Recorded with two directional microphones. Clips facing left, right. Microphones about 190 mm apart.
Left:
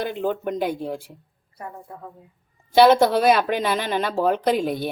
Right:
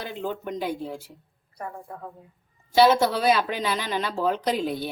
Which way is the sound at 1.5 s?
5° left (ahead or behind).